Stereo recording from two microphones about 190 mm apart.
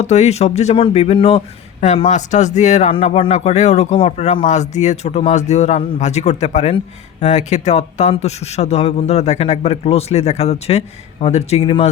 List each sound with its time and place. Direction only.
0.0 s speech: 35° left (ahead or behind)